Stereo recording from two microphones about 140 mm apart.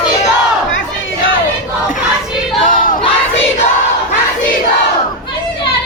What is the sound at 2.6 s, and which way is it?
Battle cry, 75° left (ahead or behind).